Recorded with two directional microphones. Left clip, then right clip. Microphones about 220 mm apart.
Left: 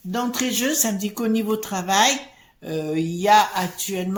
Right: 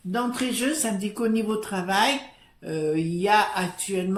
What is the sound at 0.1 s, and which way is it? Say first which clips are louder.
Speech: left 2 dB; 35° left (ahead or behind).